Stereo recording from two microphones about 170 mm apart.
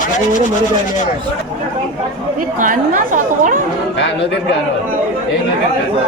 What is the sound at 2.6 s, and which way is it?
Speech, 50° right (ahead or behind).